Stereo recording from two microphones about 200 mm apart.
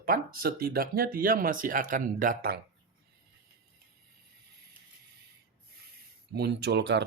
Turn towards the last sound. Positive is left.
turn(degrees=-60)  # may be behind; listen again after turning